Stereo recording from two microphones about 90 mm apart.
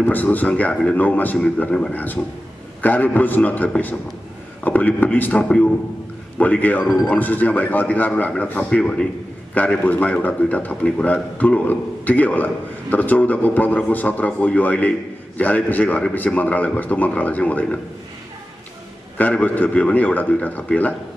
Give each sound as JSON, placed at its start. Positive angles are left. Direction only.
{"t": 0.0, "sound": "a man's voice", "side_deg": 20}
{"t": 19.1, "sound": "a man's voice", "side_deg": 20}